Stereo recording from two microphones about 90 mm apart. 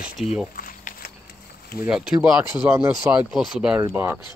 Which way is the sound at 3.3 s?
5° right (ahead or behind).